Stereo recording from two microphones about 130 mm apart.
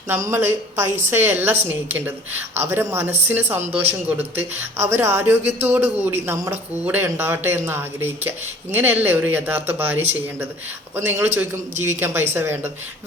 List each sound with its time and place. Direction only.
0.1 s speech: 15° right (ahead or behind)